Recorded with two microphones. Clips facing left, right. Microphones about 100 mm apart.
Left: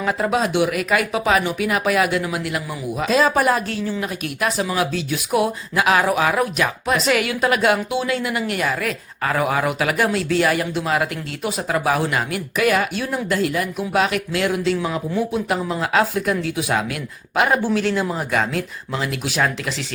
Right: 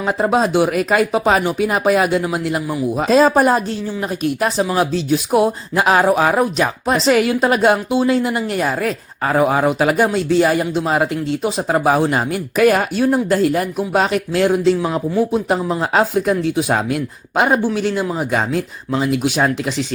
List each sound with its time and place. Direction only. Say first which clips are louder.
0.0 s speech: right 4 dB; 30° right (ahead or behind)
17.7 s speech: right 2 dB; 15° right (ahead or behind)